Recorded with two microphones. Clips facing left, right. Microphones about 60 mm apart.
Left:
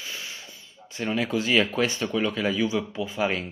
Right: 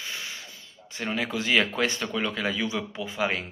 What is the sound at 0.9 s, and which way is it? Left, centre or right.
Speech, right.